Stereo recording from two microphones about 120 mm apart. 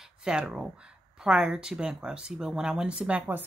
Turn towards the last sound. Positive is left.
turn(degrees=-10)  # may be behind; listen again after turning